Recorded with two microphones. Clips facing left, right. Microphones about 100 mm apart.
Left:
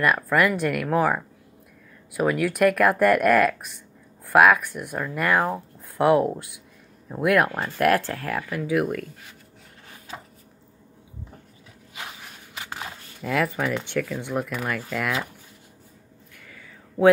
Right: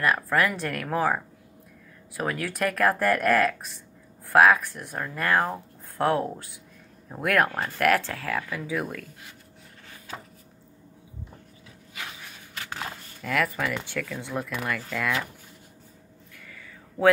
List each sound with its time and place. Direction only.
0.1 s speech: 10° left (ahead or behind)
8.1 s speech: 10° left (ahead or behind)
11.9 s walk: 20° left (ahead or behind)
13.2 s speech: 25° left (ahead or behind)